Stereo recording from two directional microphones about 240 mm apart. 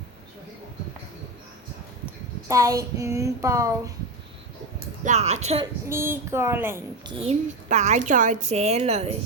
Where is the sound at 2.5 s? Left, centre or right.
Centre.